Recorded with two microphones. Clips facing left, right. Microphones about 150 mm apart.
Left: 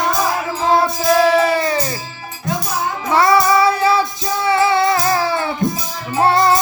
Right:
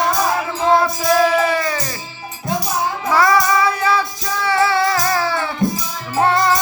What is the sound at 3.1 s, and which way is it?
Child singing, 25° left (ahead or behind).